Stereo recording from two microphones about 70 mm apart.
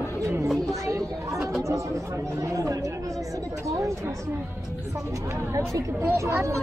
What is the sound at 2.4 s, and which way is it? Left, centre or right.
Speech, right.